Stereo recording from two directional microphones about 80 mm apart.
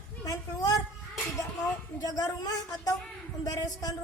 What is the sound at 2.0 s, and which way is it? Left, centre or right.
Speech, left.